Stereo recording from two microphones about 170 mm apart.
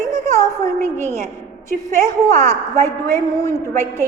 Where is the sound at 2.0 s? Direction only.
15° left (ahead or behind).